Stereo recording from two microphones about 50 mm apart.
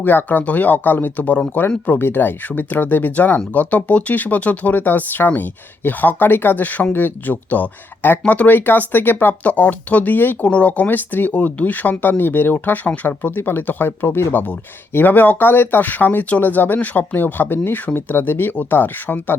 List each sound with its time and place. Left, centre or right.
0.0 s speech: left
1.5 s speech: left
2.6 s speech: left
10.4 s speech: left
10.8 s speech: left